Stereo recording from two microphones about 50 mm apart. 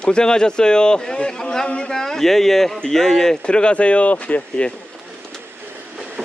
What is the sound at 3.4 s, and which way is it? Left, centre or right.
Speech, centre.